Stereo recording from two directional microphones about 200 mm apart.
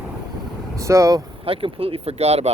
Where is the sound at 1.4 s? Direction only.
30° right (ahead or behind).